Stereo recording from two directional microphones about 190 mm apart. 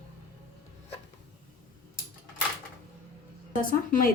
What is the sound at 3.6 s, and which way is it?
Speech, 45° left (ahead or behind).